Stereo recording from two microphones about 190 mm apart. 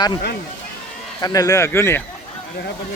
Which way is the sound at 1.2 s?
20° left (ahead or behind).